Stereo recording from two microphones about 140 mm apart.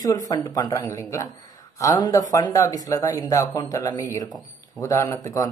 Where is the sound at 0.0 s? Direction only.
25° left (ahead or behind).